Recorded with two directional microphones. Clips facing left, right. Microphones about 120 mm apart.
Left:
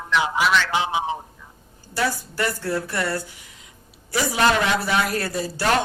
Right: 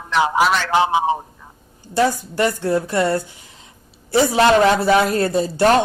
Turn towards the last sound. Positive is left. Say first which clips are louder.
# right 8 dB
turn(degrees=-25)  # may be behind; listen again after turning